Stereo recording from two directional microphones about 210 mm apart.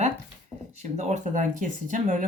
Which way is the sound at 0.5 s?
20° left (ahead or behind).